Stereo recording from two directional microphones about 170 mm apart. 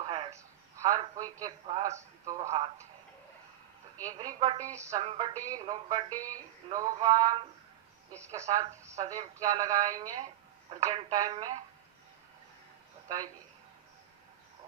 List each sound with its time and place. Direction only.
0.0 s a sound: 25° right (ahead or behind)
2.2 s speech: 20° right (ahead or behind)
4.2 s speech: 25° right (ahead or behind)
4.8 s music: 20° right (ahead or behind)
5.0 s speech: 25° right (ahead or behind)